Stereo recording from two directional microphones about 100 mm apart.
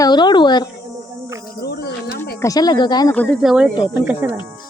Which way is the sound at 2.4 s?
40° left (ahead or behind).